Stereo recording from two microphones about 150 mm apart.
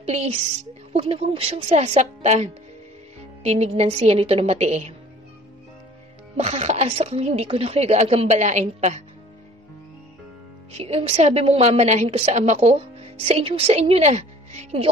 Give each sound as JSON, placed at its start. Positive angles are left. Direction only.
{"t": 0.0, "sound": "a woman's voice", "side_deg": -45}
{"t": 6.3, "sound": "a woman's voice", "side_deg": -45}
{"t": 10.7, "sound": "a woman's voice", "side_deg": -40}